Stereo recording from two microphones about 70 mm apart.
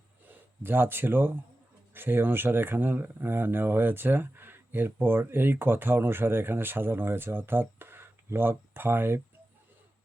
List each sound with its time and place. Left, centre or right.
0.3 s speech: right